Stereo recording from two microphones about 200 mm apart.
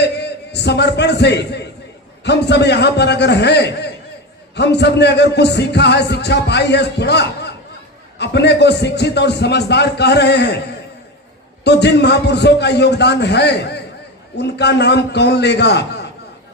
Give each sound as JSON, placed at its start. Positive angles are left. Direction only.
{"t": 0.0, "sound": "a man's voice", "side_deg": 55}
{"t": 11.6, "sound": "speech", "side_deg": 60}